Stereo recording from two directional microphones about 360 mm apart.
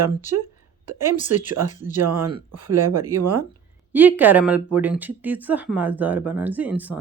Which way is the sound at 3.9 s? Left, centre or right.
Centre.